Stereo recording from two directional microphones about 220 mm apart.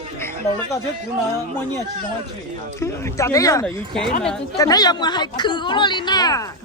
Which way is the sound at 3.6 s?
Centre (ahead or behind).